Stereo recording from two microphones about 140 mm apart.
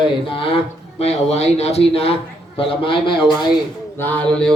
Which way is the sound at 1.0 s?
50° left (ahead or behind).